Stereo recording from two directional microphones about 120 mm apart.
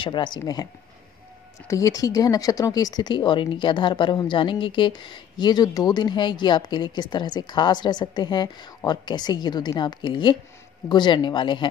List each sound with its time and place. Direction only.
0.0 s speech: 40° left (ahead or behind)
1.7 s speech: 30° left (ahead or behind)